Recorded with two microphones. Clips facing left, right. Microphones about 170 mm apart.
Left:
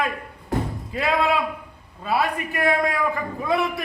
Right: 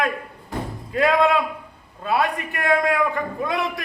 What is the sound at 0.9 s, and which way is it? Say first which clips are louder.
A man's voice: right 4 dB; centre (ahead or behind).